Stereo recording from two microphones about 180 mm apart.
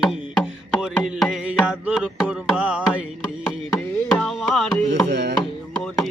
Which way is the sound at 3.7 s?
5° left (ahead or behind).